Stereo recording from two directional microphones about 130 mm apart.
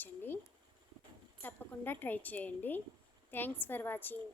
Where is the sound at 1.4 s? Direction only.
15° left (ahead or behind).